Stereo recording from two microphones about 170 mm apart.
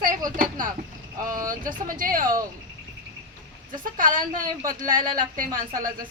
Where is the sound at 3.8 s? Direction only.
55° right (ahead or behind).